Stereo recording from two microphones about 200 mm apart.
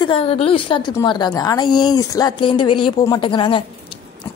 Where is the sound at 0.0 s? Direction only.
25° left (ahead or behind).